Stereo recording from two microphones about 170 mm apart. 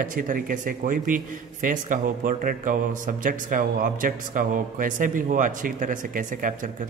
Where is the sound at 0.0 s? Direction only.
55° right (ahead or behind).